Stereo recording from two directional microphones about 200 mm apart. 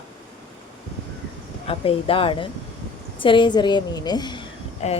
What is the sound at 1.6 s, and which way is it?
A woman's voice, 30° left (ahead or behind).